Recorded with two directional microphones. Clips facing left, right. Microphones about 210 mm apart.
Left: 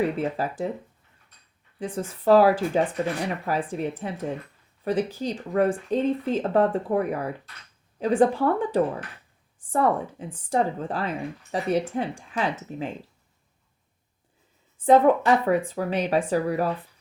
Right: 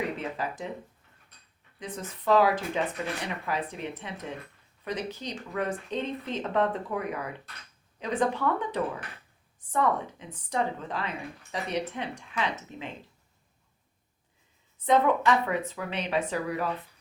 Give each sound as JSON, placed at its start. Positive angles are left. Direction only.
{"t": 0.2, "sound": "speech", "side_deg": 35}
{"t": 2.0, "sound": "speech", "side_deg": 35}
{"t": 5.9, "sound": "speech", "side_deg": 10}
{"t": 6.2, "sound": "speech", "side_deg": 35}
{"t": 14.8, "sound": "speech", "side_deg": 35}